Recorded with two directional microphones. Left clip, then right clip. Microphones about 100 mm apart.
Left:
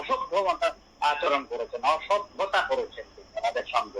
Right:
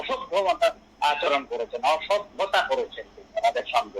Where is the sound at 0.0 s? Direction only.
20° right (ahead or behind).